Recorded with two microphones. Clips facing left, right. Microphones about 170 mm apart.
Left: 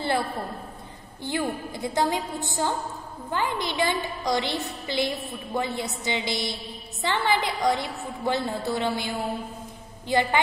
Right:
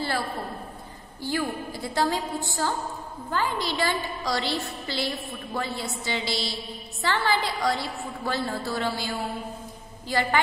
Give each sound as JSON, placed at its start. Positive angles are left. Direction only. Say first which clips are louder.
{"t": 1.2, "sound": "a woman's voice", "louder": "even", "side_deg": 20}